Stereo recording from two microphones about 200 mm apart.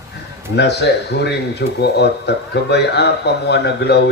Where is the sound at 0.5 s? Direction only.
55° left (ahead or behind).